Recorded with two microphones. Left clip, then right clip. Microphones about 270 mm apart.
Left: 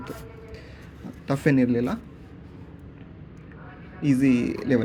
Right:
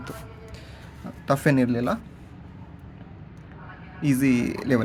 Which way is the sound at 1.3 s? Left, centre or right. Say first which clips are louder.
Right 1 dB; centre.